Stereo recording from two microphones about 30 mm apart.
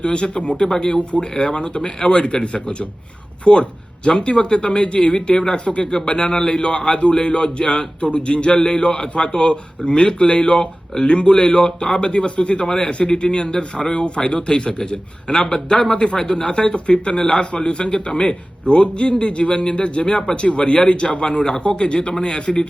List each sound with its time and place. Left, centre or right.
0.0 s speech: left
0.6 s a man's voice: left
1.5 s speech: left
5.8 s a man's voice: left
12.6 s a man's voice: left
13.1 s speech: left
15.3 s a man's voice: centre